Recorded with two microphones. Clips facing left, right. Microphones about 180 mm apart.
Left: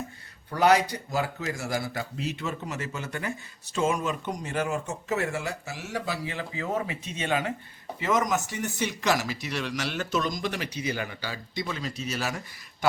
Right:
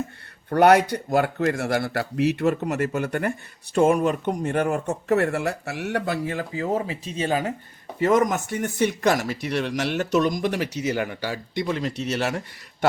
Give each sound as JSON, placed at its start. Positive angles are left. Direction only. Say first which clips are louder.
{"t": 0.5, "sound": "speech", "louder": "right 6 dB", "side_deg": -60}
{"t": 7.9, "sound": "speech", "louder": "right 6 dB", "side_deg": -50}